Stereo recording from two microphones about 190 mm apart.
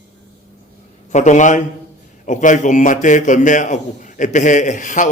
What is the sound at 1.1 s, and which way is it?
A man's voice, 40° left (ahead or behind).